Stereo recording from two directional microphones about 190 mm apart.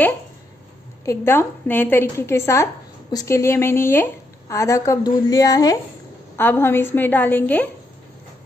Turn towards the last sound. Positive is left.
turn(degrees=10)  # may be behind; listen again after turning